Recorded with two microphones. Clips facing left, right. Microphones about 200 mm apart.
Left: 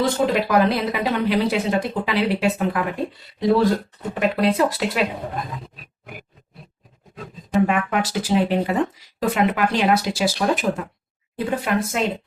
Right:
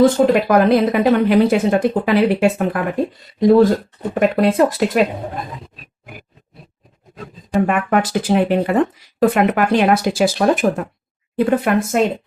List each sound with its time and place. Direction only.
0.0 s speech: 50° right (ahead or behind)
7.7 s speech: 50° right (ahead or behind)